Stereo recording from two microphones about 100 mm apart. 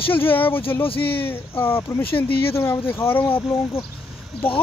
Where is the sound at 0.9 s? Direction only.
65° left (ahead or behind).